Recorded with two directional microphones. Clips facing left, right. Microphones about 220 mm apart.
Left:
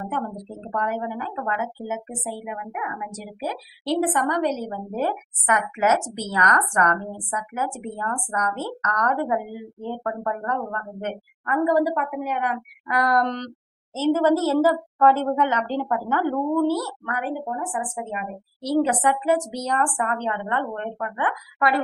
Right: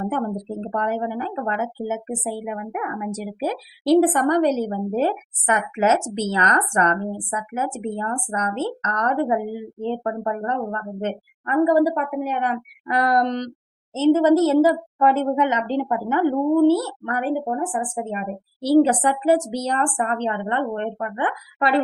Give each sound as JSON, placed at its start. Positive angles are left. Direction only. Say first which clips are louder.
{"t": 0.7, "sound": "speech", "louder": "right 2 dB", "side_deg": -30}
{"t": 3.8, "sound": "a woman's voice", "louder": "right 7 dB", "side_deg": -35}